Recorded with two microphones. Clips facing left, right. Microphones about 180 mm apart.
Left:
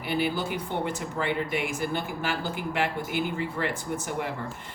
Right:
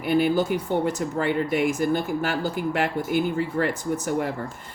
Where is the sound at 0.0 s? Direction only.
45° right (ahead or behind).